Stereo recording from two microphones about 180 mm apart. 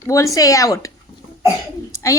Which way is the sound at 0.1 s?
15° left (ahead or behind).